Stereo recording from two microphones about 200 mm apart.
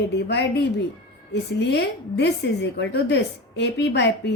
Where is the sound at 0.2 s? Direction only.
55° left (ahead or behind).